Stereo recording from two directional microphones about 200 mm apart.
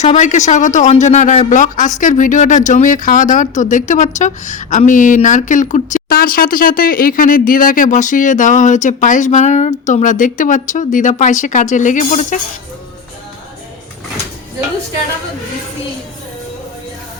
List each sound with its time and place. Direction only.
0.0 s speech: 35° left (ahead or behind)